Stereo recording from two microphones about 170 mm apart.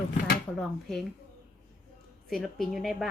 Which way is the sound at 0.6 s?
5° left (ahead or behind).